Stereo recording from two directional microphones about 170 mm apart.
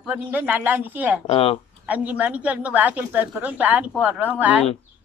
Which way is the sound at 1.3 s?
35° left (ahead or behind).